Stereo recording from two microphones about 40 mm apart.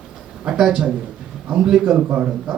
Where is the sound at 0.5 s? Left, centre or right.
Centre.